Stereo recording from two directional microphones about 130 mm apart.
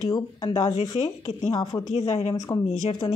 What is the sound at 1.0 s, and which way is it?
Speech, 55° left (ahead or behind).